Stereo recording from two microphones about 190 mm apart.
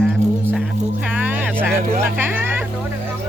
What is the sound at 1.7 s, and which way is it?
Speech, 10° right (ahead or behind).